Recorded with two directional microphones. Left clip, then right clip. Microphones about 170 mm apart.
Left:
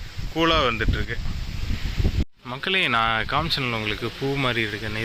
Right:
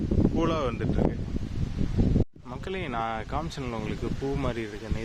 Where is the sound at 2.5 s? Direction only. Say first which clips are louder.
Left 16 dB; 5° right (ahead or behind).